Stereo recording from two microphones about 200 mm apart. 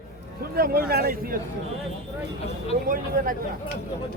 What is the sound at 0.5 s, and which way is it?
Speech, 50° right (ahead or behind).